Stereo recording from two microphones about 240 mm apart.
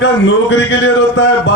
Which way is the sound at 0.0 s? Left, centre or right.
Left.